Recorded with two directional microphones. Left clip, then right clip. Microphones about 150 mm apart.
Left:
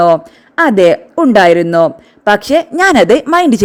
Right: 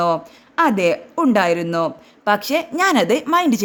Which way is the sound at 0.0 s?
40° left (ahead or behind).